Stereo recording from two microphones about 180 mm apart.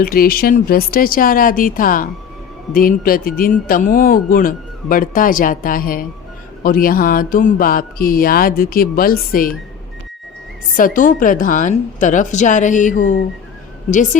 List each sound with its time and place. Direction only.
0.0 s speech: 55° left (ahead or behind)
10.8 s speech: 50° left (ahead or behind)